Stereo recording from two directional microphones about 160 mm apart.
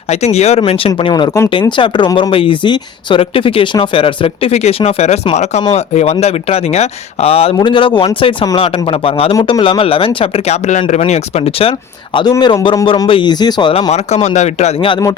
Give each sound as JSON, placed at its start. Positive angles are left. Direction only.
{"t": 0.1, "sound": "speech", "side_deg": 40}
{"t": 12.1, "sound": "speech", "side_deg": 25}